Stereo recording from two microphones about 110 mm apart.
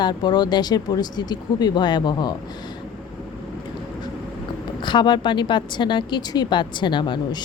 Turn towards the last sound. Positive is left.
turn(degrees=45)  # may be behind; listen again after turning